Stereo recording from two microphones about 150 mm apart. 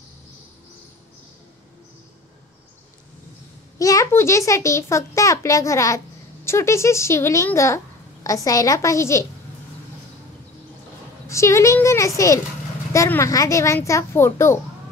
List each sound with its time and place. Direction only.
3.7 s a child's voice: 20° left (ahead or behind)
11.2 s a child's voice: 20° left (ahead or behind)